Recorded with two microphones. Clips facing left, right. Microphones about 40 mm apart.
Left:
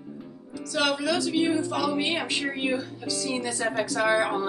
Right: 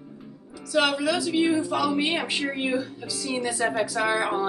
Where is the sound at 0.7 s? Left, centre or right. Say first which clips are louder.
Right 2 dB; centre.